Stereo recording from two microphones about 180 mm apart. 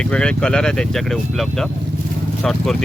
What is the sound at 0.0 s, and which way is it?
Speech, 5° left (ahead or behind).